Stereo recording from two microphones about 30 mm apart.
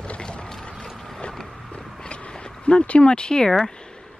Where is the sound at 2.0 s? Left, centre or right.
Left.